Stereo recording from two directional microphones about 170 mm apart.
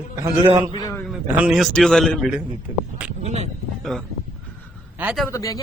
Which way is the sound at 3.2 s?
40° right (ahead or behind).